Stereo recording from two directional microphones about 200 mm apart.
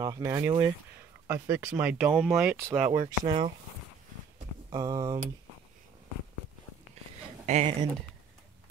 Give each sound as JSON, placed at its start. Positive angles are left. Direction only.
{"t": 0.0, "sound": "speech", "side_deg": -15}
{"t": 2.4, "sound": "speech", "side_deg": -15}
{"t": 2.9, "sound": "speech", "side_deg": -25}
{"t": 4.6, "sound": "speech", "side_deg": -20}
{"t": 7.4, "sound": "speech", "side_deg": -35}